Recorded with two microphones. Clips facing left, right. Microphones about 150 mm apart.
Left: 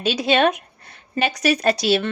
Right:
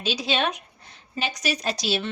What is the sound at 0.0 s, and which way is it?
Speech, 60° left (ahead or behind).